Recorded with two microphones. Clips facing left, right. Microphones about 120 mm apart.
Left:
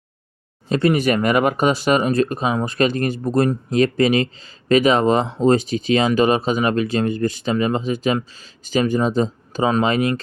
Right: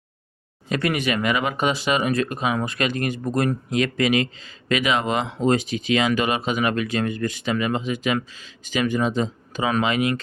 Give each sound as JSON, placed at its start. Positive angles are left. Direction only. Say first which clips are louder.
{"t": 0.7, "sound": "speech", "louder": "left 6 dB", "side_deg": 30}